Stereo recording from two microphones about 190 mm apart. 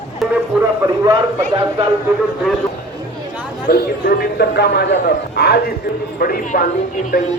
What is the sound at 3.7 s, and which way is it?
Speech, 55° left (ahead or behind).